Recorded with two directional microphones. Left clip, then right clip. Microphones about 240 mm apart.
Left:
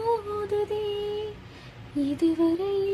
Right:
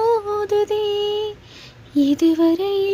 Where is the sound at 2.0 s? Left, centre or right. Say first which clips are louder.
Right 8 dB; right.